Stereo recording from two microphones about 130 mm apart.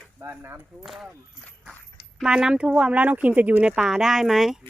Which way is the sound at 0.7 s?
Centre (ahead or behind).